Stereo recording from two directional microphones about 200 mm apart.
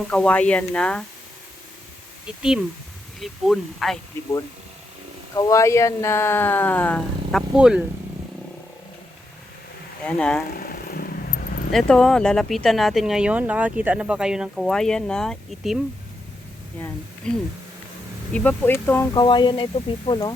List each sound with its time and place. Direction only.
0.1 s speech: 5° left (ahead or behind)
2.2 s speech: 5° right (ahead or behind)
5.3 s speech: 15° left (ahead or behind); by 7.9 s 5° right (ahead or behind)
10.1 s speech: 5° left (ahead or behind)
10.5 s vehicle: 45° left (ahead or behind)
11.7 s speech: 5° left (ahead or behind)
17.2 s speech: 5° left (ahead or behind)
19.1 s speech: 20° left (ahead or behind)